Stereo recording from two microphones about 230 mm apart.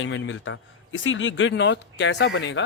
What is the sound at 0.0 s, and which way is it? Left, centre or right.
A man's voice, left.